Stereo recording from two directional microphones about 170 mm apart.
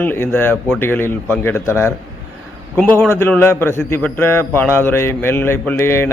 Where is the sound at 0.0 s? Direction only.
15° left (ahead or behind).